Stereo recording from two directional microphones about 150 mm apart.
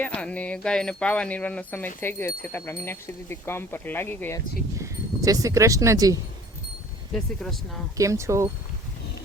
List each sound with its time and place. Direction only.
0.0 s speech: 5° left (ahead or behind)
4.8 s speech: 20° right (ahead or behind)
7.1 s speech: centre (ahead or behind)
7.9 s speech: 20° right (ahead or behind)